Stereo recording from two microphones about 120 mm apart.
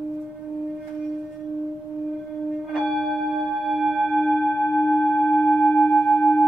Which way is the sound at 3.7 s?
Centre (ahead or behind).